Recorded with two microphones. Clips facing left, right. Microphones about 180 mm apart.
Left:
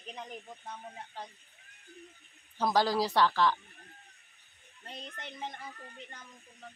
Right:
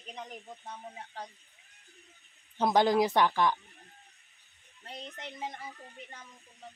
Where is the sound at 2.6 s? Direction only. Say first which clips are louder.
Right 3 dB; 20° right (ahead or behind).